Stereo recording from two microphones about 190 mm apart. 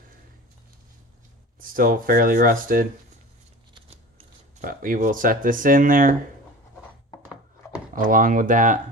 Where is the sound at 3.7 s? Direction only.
30° right (ahead or behind).